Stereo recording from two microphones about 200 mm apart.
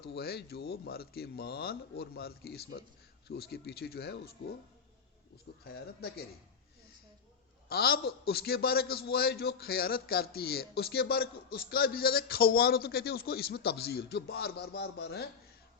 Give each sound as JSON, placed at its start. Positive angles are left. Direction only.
{"t": 0.0, "sound": "a man's voice", "side_deg": 55}
{"t": 5.6, "sound": "a man's voice", "side_deg": 50}
{"t": 7.7, "sound": "a man's voice", "side_deg": 50}